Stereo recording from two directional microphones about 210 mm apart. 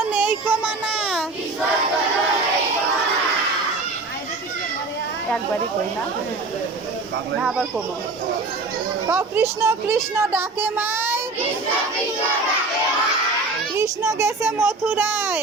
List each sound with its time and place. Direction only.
0.0 s child singing: 10° right (ahead or behind)
7.4 s speech: centre (ahead or behind)
9.0 s a woman's voice: 10° right (ahead or behind)
13.7 s a woman's voice: 15° right (ahead or behind)